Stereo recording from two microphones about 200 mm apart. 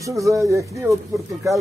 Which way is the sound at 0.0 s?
15° right (ahead or behind).